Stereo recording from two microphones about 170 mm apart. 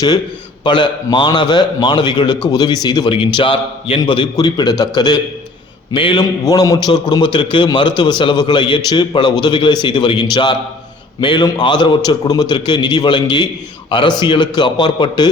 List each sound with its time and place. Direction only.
0.6 s a man's voice: 25° left (ahead or behind)